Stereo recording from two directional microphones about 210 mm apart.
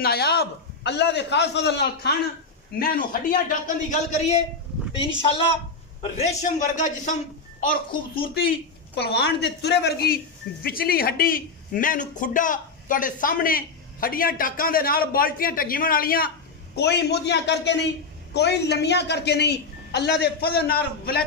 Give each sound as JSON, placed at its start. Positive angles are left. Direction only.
{"t": 0.0, "sound": "a man's voice", "side_deg": 50}
{"t": 5.2, "sound": "a woman's voice", "side_deg": 25}
{"t": 8.9, "sound": "speech", "side_deg": 55}